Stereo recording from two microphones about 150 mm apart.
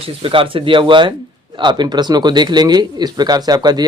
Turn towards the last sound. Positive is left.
turn(degrees=-25)  # may be behind; listen again after turning